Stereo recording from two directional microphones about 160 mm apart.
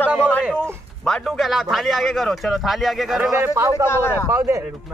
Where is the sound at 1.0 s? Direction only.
Centre (ahead or behind).